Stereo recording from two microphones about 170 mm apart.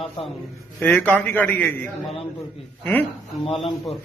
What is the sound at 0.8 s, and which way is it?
A man's voice, 10° left (ahead or behind).